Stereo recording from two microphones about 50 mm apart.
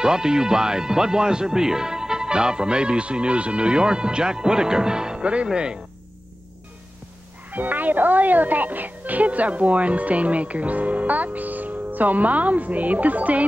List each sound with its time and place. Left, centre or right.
0.0 s speech: centre
7.5 s a woman's voice: right